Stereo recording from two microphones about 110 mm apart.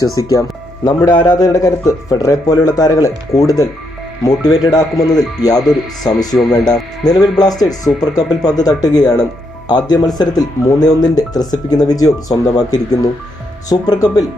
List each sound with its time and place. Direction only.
0.2 s speech: 30° left (ahead or behind)
7.0 s speech: 35° left (ahead or behind)